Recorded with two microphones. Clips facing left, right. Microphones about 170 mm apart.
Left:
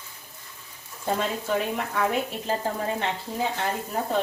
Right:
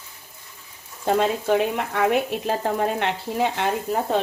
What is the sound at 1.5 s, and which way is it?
Speech, 75° right (ahead or behind).